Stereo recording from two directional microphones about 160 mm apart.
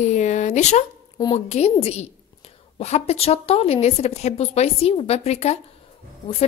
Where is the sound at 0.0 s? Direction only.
45° left (ahead or behind).